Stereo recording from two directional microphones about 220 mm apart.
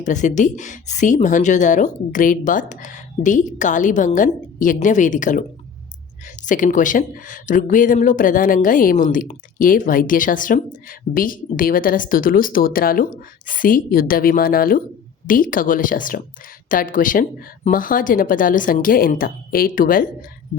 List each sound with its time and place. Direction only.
0.0 s speech: 35° left (ahead or behind)